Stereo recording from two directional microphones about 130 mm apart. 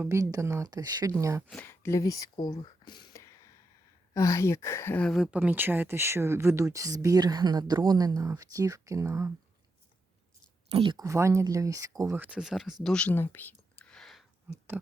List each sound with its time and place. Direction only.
0.0 s speech: 25° right (ahead or behind)
1.6 s speech: 20° left (ahead or behind); by 3.2 s 35° left (ahead or behind)
3.2 s a sound: 20° left (ahead or behind)
4.1 s a woman's voice: 25° left (ahead or behind)
5.0 s speech: 5° right (ahead or behind); by 9.3 s 25° right (ahead or behind)
10.7 s speech: 45° right (ahead or behind)
10.9 s speech: 25° right (ahead or behind); by 12.7 s 5° right (ahead or behind)
12.8 s a sound: 5° left (ahead or behind)